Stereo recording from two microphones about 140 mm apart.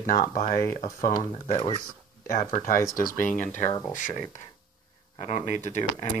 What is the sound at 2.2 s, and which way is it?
Speech, 85° left.